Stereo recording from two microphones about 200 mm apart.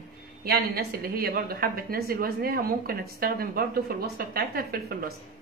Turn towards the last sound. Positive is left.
turn(degrees=-50)  # may be behind; listen again after turning